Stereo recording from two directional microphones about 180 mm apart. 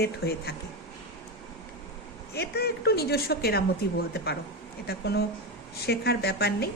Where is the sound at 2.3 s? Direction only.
65° left (ahead or behind).